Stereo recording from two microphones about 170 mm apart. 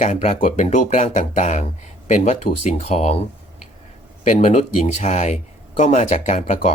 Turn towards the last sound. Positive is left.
turn(degrees=40)  # may be behind; listen again after turning